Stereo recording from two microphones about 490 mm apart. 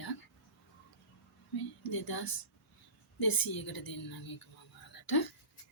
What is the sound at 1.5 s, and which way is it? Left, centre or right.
Speech, left.